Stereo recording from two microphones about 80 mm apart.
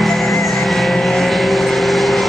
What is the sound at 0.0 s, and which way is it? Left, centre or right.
Vehicle, centre.